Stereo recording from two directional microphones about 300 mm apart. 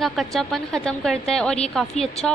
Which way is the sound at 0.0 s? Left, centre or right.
Centre.